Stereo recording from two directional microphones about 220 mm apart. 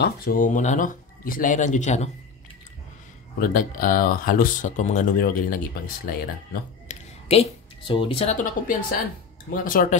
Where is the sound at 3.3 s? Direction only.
40° left (ahead or behind).